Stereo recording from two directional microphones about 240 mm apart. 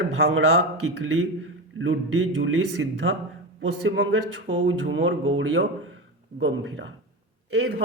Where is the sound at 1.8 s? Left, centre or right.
Right.